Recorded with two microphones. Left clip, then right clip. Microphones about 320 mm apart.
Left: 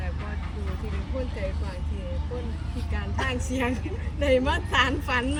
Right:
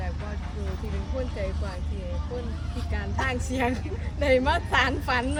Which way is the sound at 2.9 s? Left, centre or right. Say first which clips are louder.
Right 1 dB; right.